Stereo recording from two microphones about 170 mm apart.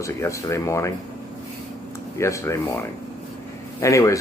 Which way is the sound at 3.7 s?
20° left (ahead or behind).